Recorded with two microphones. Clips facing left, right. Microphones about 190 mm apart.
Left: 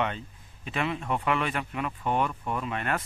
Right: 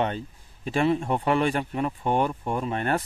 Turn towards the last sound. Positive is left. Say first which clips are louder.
# right 4 dB
turn(degrees=-35)  # may be behind; listen again after turning